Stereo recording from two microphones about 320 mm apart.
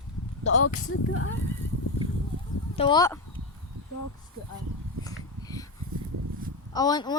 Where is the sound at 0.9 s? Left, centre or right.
Left.